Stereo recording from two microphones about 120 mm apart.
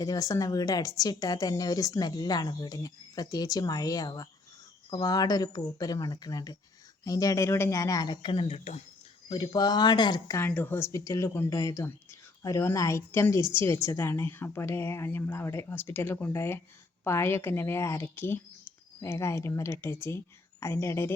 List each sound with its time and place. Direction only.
0.0 s a woman's voice: 30° left (ahead or behind)
8.5 s speech: 60° left (ahead or behind)
9.3 s a woman's voice: 35° left (ahead or behind)
10.3 s speech: 15° left (ahead or behind)